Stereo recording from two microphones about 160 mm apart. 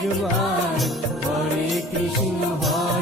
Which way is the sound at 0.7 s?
Centre (ahead or behind).